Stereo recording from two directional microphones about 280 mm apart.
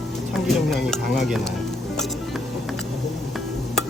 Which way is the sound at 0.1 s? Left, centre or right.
Centre.